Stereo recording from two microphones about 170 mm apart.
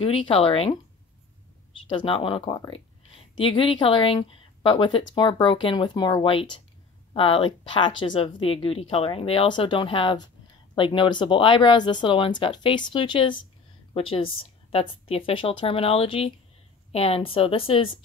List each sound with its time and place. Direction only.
0.0 s speech: 35° left (ahead or behind)
1.9 s speech: 30° left (ahead or behind)